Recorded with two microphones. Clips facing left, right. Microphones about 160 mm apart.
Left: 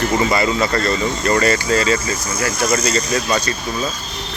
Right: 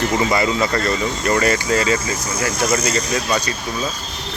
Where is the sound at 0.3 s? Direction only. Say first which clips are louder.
Left 1 dB; 15° right (ahead or behind).